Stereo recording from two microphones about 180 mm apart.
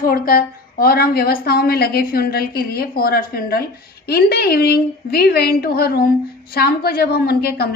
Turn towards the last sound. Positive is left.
turn(degrees=60)  # may be behind; listen again after turning